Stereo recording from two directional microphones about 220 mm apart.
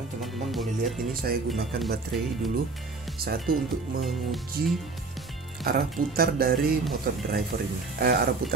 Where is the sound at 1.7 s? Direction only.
45° right (ahead or behind).